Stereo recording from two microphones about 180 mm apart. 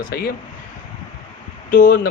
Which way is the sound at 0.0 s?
60° left (ahead or behind).